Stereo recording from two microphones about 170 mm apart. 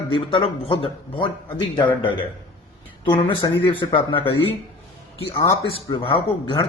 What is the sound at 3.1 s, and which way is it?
Speech, 30° left (ahead or behind).